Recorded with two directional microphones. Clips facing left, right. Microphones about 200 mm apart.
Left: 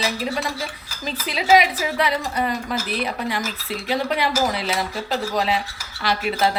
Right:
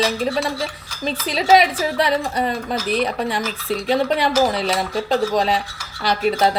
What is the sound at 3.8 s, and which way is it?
Speech, 30° right (ahead or behind).